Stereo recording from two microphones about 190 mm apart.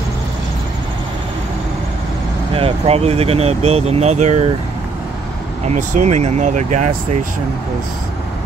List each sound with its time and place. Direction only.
2.5 s speech: 30° right (ahead or behind)
5.7 s speech: 40° right (ahead or behind)